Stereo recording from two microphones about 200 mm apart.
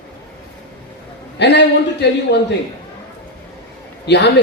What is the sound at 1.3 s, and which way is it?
Speech, 55° left (ahead or behind).